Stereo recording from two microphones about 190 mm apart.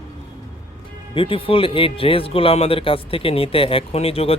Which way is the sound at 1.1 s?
30° left (ahead or behind).